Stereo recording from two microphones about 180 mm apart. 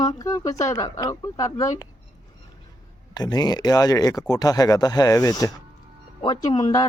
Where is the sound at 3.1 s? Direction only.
20° left (ahead or behind).